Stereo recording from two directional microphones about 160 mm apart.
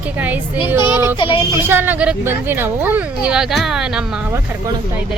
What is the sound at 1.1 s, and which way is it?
Speech, 30° left (ahead or behind).